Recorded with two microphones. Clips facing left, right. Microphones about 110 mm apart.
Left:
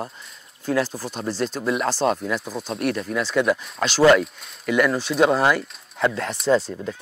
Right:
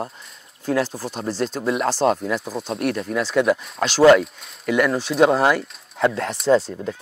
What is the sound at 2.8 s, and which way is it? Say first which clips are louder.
Speech: right 1 dB; 30° right (ahead or behind).